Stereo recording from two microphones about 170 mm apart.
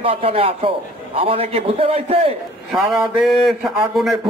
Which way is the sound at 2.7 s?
Centre (ahead or behind).